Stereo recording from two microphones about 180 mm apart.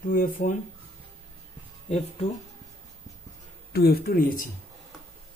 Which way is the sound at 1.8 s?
40° left (ahead or behind).